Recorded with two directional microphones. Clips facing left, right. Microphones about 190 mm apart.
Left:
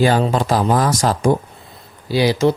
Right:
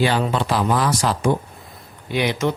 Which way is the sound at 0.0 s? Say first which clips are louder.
Left 4 dB; 40° left (ahead or behind).